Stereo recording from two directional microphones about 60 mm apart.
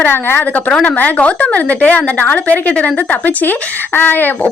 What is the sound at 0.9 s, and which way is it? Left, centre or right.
A woman's voice, left.